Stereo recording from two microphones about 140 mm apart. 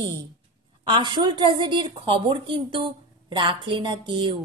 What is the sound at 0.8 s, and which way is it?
A woman's voice, 35° right (ahead or behind).